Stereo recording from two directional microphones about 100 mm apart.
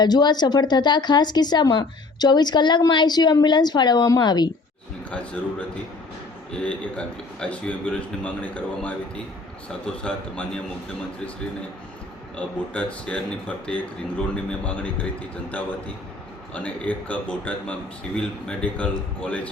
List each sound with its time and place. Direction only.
0.0 s speech: 45° left (ahead or behind)
5.1 s speech: 10° left (ahead or behind)
12.4 s speech: 10° left (ahead or behind)
16.6 s speech: 15° left (ahead or behind)